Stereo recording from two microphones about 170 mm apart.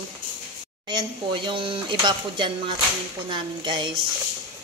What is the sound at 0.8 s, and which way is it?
Speech, 25° right (ahead or behind).